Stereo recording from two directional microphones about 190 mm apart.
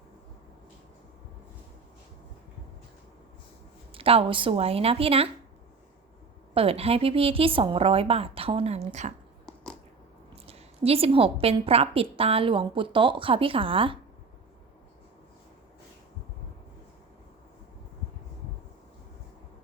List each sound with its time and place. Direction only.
3.9 s a woman's voice: 30° right (ahead or behind)
6.5 s a woman's voice: 30° right (ahead or behind)
10.4 s a woman's voice: 30° right (ahead or behind)